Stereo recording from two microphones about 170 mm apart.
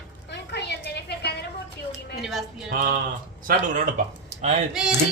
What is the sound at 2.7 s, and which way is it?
Speech, 55° right (ahead or behind).